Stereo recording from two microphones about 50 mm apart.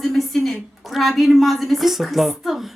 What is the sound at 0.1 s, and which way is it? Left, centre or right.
A woman's voice, centre.